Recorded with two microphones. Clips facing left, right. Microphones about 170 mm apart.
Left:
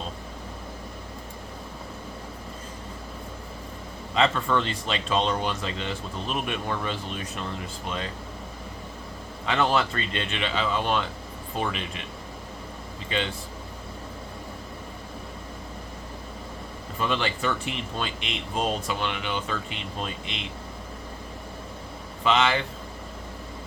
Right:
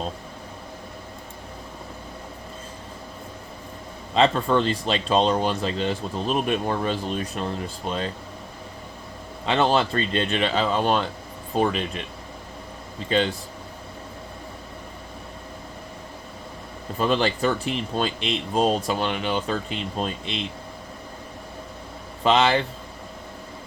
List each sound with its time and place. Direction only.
4.1 s speech: 30° right (ahead or behind)
9.5 s speech: 30° right (ahead or behind)
13.1 s speech: 40° right (ahead or behind)
17.0 s speech: 35° right (ahead or behind)
22.2 s speech: 35° right (ahead or behind)